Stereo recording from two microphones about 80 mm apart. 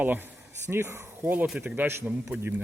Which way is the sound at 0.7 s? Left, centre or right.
Right.